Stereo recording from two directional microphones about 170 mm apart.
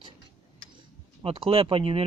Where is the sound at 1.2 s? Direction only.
30° right (ahead or behind).